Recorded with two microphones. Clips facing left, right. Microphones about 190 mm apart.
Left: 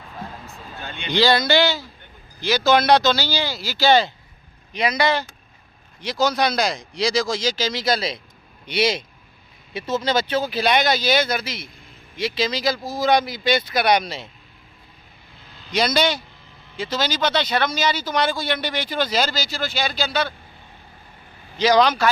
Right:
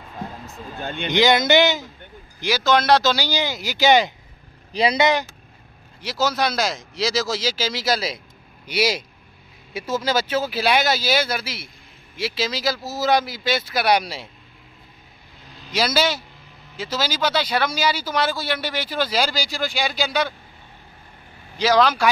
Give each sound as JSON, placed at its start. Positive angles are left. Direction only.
{"t": 0.8, "sound": "speech", "side_deg": -50}
{"t": 1.1, "sound": "speech", "side_deg": -20}
{"t": 2.6, "sound": "speech", "side_deg": 5}
{"t": 3.2, "sound": "speech", "side_deg": -15}
{"t": 4.7, "sound": "speech", "side_deg": -30}
{"t": 5.9, "sound": "speech", "side_deg": -5}
{"t": 15.7, "sound": "speech", "side_deg": -5}
{"t": 21.5, "sound": "speech", "side_deg": -5}